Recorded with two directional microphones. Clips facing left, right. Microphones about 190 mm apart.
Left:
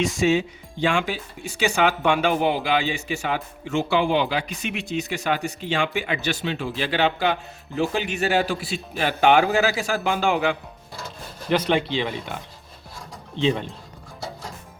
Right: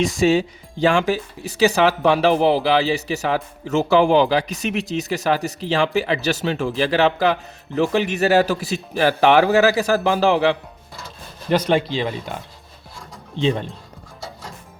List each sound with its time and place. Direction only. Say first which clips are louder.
0.3 s speech: right 3 dB; 35° right (ahead or behind)